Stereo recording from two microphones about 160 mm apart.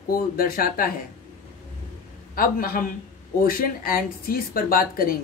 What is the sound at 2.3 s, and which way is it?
Speech, 65° left (ahead or behind).